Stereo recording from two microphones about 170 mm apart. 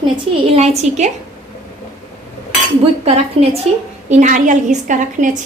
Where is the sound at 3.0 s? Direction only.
40° right (ahead or behind).